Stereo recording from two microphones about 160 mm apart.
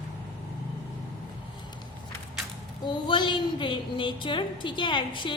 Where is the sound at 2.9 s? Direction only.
30° left (ahead or behind).